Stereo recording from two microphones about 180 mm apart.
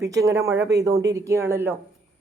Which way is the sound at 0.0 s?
20° right (ahead or behind).